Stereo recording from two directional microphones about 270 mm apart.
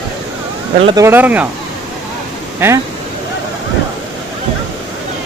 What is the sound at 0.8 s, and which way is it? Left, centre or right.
Speech, centre.